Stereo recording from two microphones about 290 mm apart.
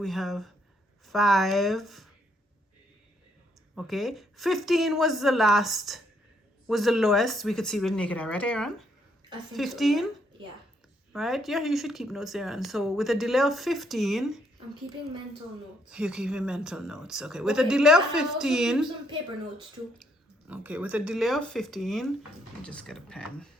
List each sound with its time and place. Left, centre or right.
0.0 s speech: centre
3.8 s speech: centre
11.1 s speech: centre
15.9 s speech: centre
20.5 s speech: centre